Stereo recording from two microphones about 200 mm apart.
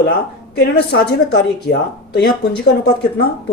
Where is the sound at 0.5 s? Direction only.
55° left (ahead or behind).